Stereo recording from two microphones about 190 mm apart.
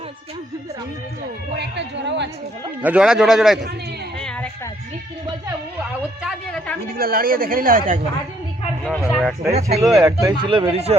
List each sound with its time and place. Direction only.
1.5 s a woman's voice: 65° right (ahead or behind)
2.8 s a woman's voice: 5° right (ahead or behind)
4.2 s a sound: 5° left (ahead or behind)
6.0 s a woman's voice: centre (ahead or behind)
6.9 s speech: 50° right (ahead or behind)
8.8 s a woman's voice: centre (ahead or behind)
9.5 s speech: 35° right (ahead or behind)
10.0 s speech: 20° right (ahead or behind)